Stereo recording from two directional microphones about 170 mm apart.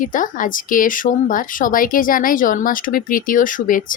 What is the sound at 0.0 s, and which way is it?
Speech, 50° left (ahead or behind).